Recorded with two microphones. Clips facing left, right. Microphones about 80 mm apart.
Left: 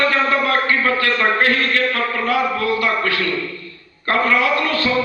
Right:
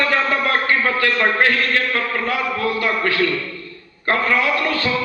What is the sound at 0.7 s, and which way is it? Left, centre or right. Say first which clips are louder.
A man's voice: left 1 dB; right.